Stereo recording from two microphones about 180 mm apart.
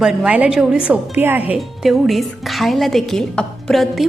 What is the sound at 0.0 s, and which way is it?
A woman's voice, centre (ahead or behind).